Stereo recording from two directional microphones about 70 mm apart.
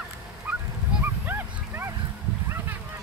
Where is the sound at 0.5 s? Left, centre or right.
Centre.